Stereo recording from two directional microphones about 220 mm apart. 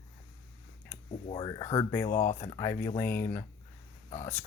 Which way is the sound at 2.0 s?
35° left (ahead or behind).